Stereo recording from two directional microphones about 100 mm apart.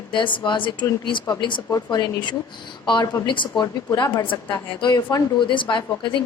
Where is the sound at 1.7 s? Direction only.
40° left (ahead or behind).